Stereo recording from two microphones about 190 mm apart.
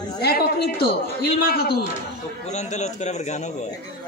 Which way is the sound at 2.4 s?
35° left (ahead or behind).